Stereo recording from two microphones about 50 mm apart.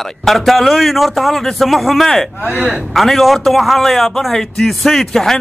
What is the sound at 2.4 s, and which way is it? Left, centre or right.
Speech, right.